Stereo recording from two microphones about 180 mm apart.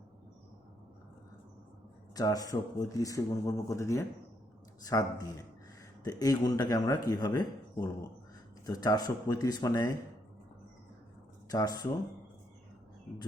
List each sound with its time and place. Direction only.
2.1 s speech: 20° left (ahead or behind)
11.5 s speech: 20° left (ahead or behind)